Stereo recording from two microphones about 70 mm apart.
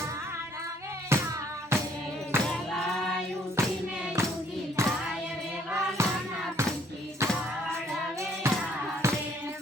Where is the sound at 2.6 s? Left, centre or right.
Centre.